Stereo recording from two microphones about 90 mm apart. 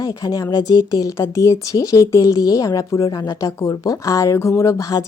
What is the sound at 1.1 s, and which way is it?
Speech, 35° left (ahead or behind).